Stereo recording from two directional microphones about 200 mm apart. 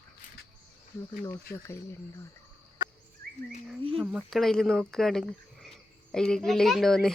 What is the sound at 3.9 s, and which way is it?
Speech, 5° right (ahead or behind).